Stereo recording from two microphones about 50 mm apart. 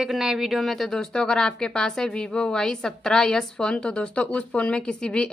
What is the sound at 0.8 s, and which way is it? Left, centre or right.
A woman's voice, centre.